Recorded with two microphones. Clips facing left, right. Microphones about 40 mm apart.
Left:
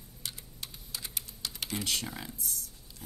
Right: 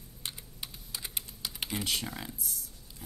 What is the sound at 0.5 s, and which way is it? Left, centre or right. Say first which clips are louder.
Computer keyboard: even; centre.